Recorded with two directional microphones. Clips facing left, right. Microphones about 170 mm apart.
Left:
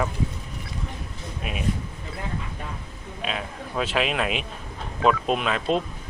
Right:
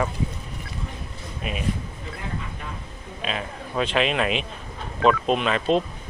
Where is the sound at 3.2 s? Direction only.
Centre (ahead or behind).